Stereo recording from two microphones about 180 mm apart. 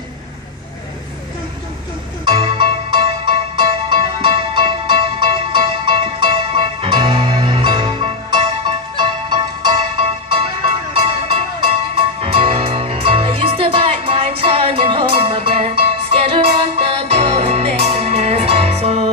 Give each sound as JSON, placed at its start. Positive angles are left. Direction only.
{"t": 2.2, "sound": "music", "side_deg": -25}